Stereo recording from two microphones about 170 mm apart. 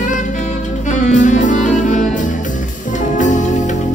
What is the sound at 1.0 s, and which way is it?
Music, 45° left (ahead or behind).